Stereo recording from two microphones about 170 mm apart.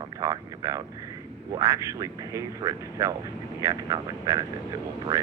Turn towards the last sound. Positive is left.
turn(degrees=-15)  # may be behind; listen again after turning